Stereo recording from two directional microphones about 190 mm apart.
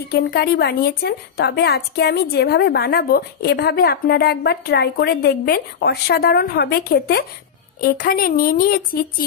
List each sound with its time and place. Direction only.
0.1 s a woman's voice: 55° left (ahead or behind)